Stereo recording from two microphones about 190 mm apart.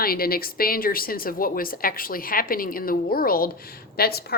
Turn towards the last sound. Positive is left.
turn(degrees=55)  # may be behind; listen again after turning